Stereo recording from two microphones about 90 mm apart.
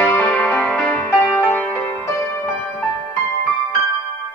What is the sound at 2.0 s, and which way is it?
Music, 30° left (ahead or behind).